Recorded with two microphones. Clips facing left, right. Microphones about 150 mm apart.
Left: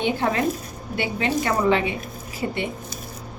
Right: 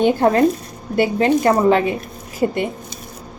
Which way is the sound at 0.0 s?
45° right (ahead or behind).